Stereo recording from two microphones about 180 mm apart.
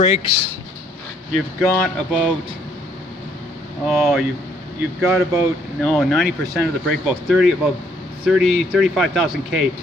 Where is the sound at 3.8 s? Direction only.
Centre (ahead or behind).